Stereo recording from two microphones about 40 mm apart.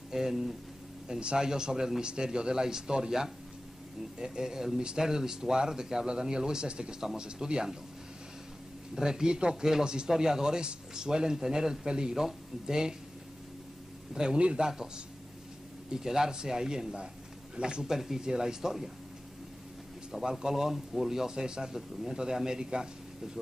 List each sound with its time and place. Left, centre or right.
0.1 s a man's voice: centre
8.9 s speech: centre
14.1 s a man's voice: right
14.6 s speech: centre
15.9 s a man's voice: centre
17.9 s speech: centre
20.2 s a man's voice: centre